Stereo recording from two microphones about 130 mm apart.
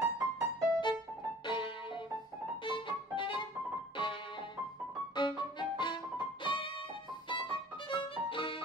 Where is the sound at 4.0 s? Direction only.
40° left (ahead or behind).